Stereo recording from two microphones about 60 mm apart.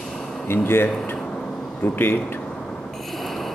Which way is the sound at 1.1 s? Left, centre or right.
Centre.